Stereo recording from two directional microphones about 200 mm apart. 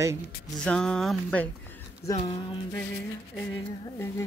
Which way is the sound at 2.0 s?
15° left (ahead or behind).